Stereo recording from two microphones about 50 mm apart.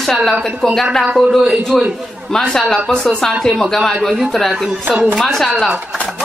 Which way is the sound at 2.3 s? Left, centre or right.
Centre.